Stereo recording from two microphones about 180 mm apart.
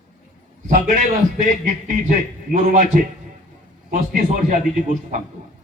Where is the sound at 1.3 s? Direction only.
45° right (ahead or behind).